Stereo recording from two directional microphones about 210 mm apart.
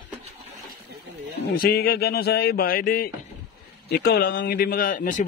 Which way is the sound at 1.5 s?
45° left (ahead or behind).